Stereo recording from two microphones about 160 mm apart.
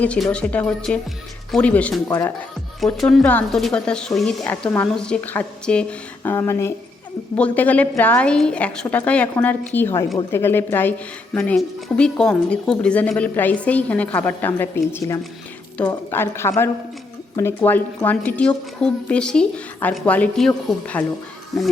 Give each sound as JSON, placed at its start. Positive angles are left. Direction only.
{"t": 0.0, "sound": "a woman's voice", "side_deg": 5}
{"t": 2.0, "sound": "speech", "side_deg": 20}
{"t": 2.8, "sound": "a woman's voice", "side_deg": 0}